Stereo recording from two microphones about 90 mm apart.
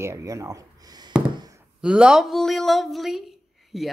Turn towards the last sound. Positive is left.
turn(degrees=-5)  # may be behind; listen again after turning